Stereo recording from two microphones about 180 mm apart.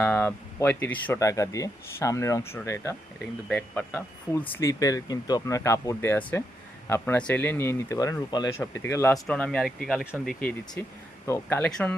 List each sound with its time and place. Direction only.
0.0 s speech: 10° left (ahead or behind)
10.8 s speech: 10° left (ahead or behind)